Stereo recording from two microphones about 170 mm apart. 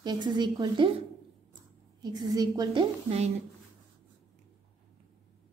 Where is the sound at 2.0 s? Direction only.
25° right (ahead or behind).